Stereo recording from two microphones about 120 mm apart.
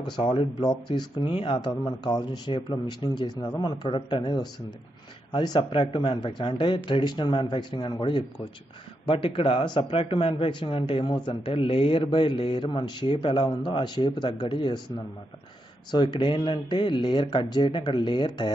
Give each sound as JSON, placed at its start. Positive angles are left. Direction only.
{"t": 0.0, "sound": "speech", "side_deg": 45}
{"t": 0.6, "sound": "speech", "side_deg": 35}
{"t": 15.9, "sound": "speech", "side_deg": 40}